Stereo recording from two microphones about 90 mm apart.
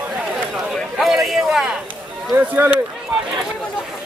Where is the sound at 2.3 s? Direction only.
25° right (ahead or behind).